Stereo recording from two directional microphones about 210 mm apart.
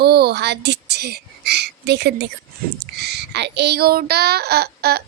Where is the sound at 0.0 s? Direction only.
50° right (ahead or behind).